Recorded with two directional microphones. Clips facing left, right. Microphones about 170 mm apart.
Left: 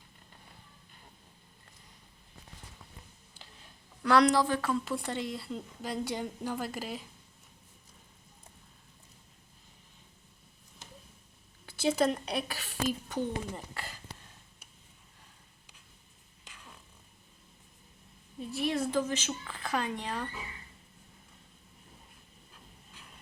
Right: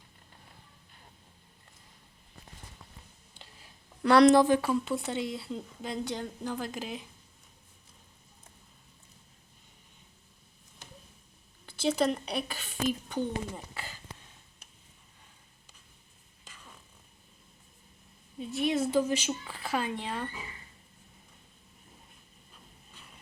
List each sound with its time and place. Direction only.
3.3 s a sound: centre (ahead or behind)
4.0 s speech: 25° right (ahead or behind)
4.9 s a woman's voice: centre (ahead or behind)
11.6 s a woman's voice: 5° left (ahead or behind)
13.7 s a sound: centre (ahead or behind)
16.4 s fart: 10° left (ahead or behind)
18.3 s a woman's voice: centre (ahead or behind)